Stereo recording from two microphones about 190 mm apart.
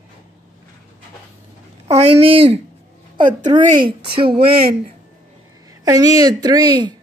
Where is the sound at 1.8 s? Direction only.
35° right (ahead or behind).